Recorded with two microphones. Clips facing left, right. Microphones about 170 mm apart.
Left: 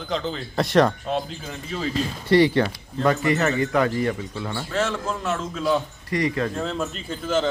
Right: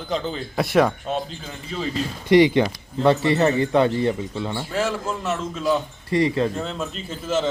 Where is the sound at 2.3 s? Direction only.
15° right (ahead or behind).